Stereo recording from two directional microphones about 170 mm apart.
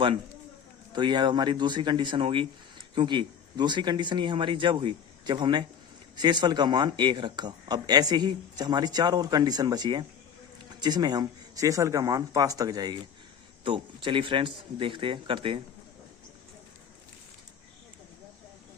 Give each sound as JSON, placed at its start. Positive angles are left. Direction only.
{"t": 0.9, "sound": "speech", "side_deg": -25}